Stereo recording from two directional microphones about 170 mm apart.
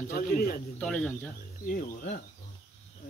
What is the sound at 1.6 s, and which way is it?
Speech, 55° left (ahead or behind).